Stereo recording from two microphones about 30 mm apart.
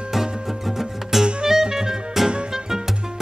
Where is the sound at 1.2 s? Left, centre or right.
Right.